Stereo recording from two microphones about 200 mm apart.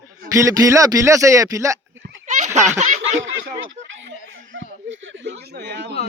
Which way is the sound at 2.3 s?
35° right (ahead or behind).